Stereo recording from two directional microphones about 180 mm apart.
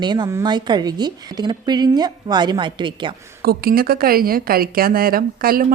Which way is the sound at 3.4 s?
55° right (ahead or behind).